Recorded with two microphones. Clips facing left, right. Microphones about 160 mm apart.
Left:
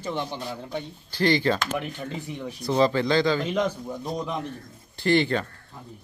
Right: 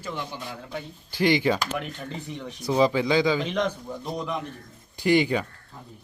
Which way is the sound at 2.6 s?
10° right (ahead or behind).